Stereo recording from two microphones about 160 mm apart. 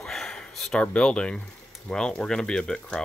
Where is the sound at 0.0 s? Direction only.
Centre (ahead or behind).